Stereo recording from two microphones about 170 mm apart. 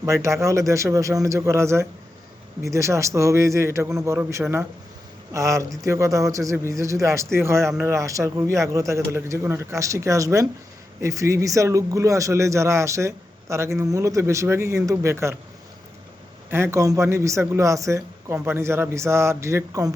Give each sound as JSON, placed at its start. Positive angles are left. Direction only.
{"t": 0.0, "sound": "a man's voice", "side_deg": -15}
{"t": 16.5, "sound": "a man's voice", "side_deg": -15}